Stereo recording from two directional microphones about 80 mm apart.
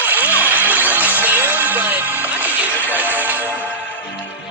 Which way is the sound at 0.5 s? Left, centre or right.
Right.